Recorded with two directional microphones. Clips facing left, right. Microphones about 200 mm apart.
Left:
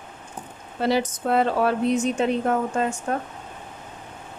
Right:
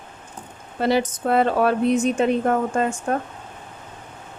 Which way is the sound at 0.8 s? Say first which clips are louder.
Right 2 dB; 55° right (ahead or behind).